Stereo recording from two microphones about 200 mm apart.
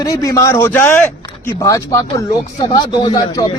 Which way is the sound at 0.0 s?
15° left (ahead or behind).